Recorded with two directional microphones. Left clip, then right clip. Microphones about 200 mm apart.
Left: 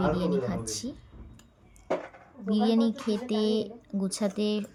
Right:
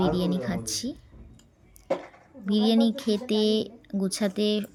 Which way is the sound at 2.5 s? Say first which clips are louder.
Right 2 dB; 5° right (ahead or behind).